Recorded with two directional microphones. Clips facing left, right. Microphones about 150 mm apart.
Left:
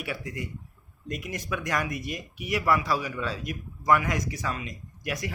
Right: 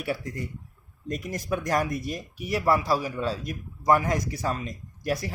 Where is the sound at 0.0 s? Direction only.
35° right (ahead or behind).